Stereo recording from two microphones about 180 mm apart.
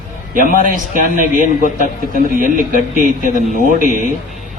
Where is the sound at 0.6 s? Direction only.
45° right (ahead or behind).